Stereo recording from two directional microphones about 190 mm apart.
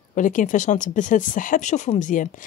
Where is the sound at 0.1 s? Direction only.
45° left (ahead or behind).